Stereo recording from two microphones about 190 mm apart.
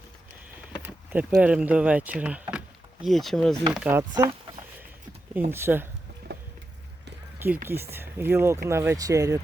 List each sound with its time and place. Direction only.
0.8 s speech: 10° right (ahead or behind)
3.7 s speech: 10° right (ahead or behind)
4.1 s speech: 20° right (ahead or behind)
6.3 s vehicle: 65° right (ahead or behind)
7.3 s speech: 10° right (ahead or behind)